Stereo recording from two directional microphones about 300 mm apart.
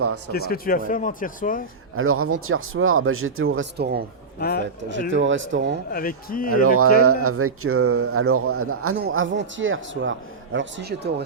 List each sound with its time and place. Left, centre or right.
0.3 s speech: left
2.0 s speech: right
4.4 s a man's voice: left
5.1 s a man's voice: right
5.9 s speech: left
6.5 s speech: right
9.0 s a man's voice: right